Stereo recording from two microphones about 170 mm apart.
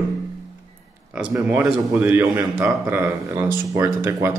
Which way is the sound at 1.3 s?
10° right (ahead or behind).